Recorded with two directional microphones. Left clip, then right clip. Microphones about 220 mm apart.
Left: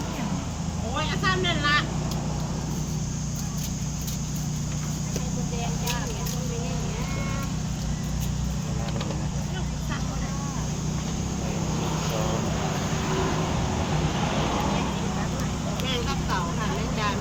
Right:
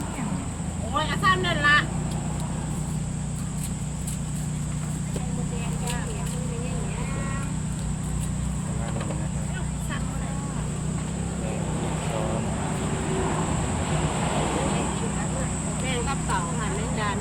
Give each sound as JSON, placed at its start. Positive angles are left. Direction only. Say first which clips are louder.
{"t": 0.9, "sound": "speech", "louder": "right 4 dB", "side_deg": -45}
{"t": 15.9, "sound": "vehicle", "louder": "right 1 dB", "side_deg": -10}